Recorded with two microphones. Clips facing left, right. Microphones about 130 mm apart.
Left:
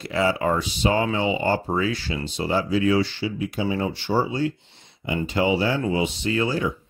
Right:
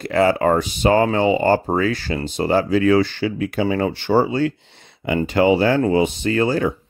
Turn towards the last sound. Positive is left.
turn(degrees=-50)  # may be behind; listen again after turning